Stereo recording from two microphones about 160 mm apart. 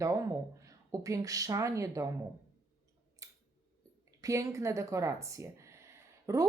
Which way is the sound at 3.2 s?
20° right (ahead or behind).